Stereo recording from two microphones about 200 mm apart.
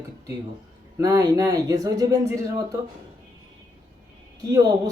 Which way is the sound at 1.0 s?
20° right (ahead or behind).